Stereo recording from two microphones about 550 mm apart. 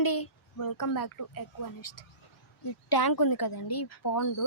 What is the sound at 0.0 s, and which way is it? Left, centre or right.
Speech, left.